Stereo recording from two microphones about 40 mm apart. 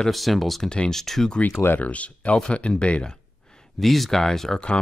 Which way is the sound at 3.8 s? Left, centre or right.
Centre.